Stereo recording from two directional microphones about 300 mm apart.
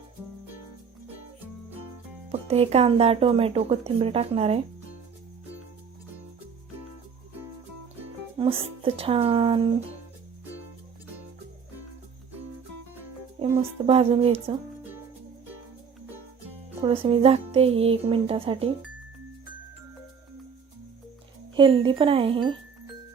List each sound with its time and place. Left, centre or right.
2.3 s speech: right
8.4 s speech: centre
13.4 s speech: centre
16.8 s speech: centre
21.5 s speech: centre